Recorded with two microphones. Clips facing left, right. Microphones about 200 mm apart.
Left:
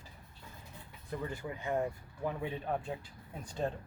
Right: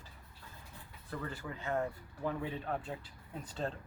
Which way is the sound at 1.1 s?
20° left (ahead or behind).